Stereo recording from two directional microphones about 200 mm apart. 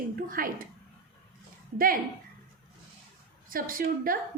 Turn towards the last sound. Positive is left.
turn(degrees=-45)  # may be behind; listen again after turning